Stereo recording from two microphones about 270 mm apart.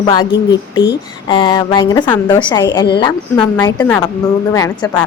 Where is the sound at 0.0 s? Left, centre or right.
Centre.